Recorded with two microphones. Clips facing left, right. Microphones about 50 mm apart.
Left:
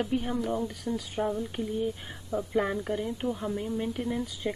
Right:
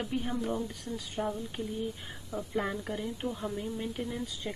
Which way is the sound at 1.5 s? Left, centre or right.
Centre.